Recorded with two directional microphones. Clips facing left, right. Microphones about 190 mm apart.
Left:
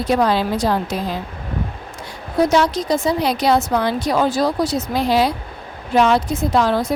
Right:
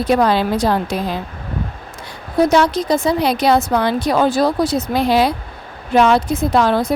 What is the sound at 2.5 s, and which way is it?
A woman's voice, 60° right (ahead or behind).